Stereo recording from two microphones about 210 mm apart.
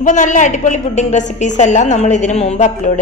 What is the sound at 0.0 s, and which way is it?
A woman's voice, 35° left (ahead or behind).